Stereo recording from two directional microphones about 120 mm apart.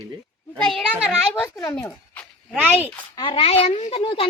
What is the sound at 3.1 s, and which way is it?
A child's voice, 40° left (ahead or behind).